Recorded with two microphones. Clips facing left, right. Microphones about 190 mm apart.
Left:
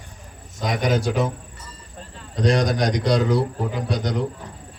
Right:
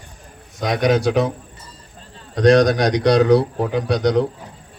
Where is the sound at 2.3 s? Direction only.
70° right (ahead or behind).